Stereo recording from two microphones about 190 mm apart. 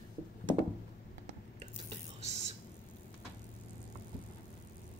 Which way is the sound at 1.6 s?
35° right (ahead or behind).